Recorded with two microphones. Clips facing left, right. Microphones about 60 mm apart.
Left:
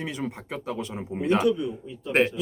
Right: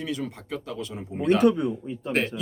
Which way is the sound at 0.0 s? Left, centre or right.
Left.